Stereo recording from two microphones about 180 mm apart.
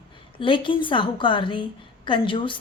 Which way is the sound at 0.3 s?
30° left (ahead or behind).